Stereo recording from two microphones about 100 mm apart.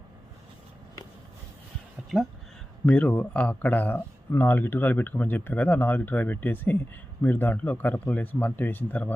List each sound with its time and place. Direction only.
2.1 s speech: centre (ahead or behind)
2.8 s speech: 15° left (ahead or behind)